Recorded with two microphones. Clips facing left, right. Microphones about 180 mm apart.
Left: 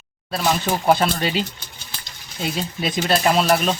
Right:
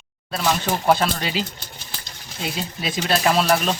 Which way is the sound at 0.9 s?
Centre (ahead or behind).